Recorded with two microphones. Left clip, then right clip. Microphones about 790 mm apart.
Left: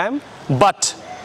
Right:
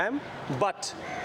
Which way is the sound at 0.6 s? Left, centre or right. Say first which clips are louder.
Left 14 dB; left.